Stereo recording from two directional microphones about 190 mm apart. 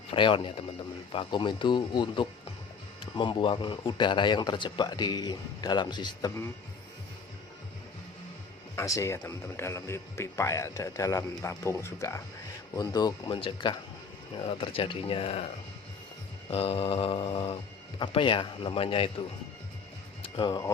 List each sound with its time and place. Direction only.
0.1 s speech: 25° left (ahead or behind)
8.7 s speech: 15° left (ahead or behind)
16.5 s speech: 30° left (ahead or behind)
20.2 s speech: 25° left (ahead or behind)